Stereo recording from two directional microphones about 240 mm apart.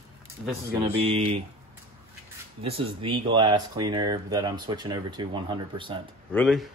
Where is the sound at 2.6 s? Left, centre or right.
Right.